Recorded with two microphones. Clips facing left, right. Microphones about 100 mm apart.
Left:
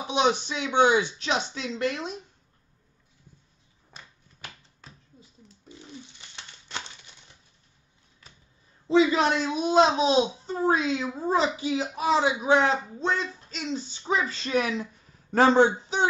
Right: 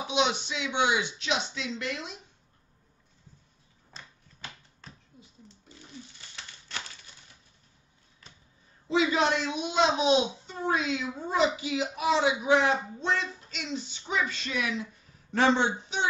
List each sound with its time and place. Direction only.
0.0 s a child's voice: 40° left (ahead or behind)
3.9 s finger snapping: 10° left (ahead or behind)
8.8 s a child's voice: 35° left (ahead or behind)